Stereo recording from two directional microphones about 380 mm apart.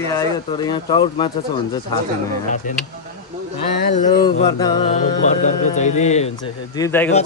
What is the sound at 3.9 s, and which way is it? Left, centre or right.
Mantra, centre.